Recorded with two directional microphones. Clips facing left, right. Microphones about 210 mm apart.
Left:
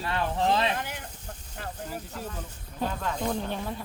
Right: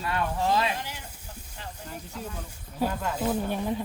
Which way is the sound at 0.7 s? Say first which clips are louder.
Left 2 dB; 55° left (ahead or behind).